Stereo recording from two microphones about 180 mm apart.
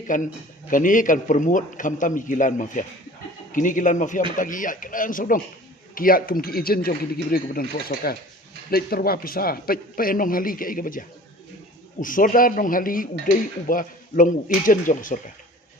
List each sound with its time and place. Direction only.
0.1 s a man's voice: 45° left (ahead or behind)